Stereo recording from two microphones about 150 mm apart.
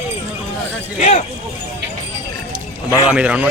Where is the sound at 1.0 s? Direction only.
45° left (ahead or behind).